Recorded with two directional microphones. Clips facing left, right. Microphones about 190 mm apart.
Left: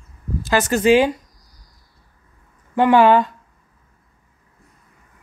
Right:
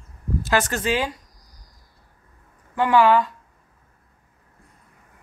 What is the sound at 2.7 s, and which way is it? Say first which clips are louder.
Speech: left 4 dB; 20° left (ahead or behind).